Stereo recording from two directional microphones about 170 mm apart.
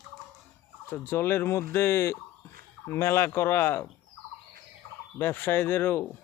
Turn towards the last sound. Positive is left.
turn(degrees=10)  # may be behind; listen again after turning